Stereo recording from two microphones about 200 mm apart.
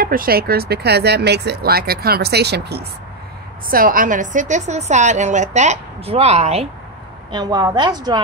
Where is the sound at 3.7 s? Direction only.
45° right (ahead or behind).